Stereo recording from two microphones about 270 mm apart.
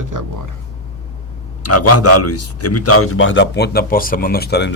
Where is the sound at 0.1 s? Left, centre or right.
Right.